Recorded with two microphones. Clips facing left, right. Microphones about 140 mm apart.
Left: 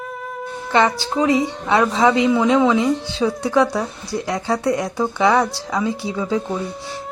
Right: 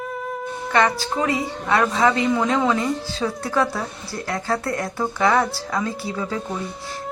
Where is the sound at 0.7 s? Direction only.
25° left (ahead or behind); by 3.3 s 10° left (ahead or behind).